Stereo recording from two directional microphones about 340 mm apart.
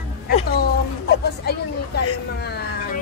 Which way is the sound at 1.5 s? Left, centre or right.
Left.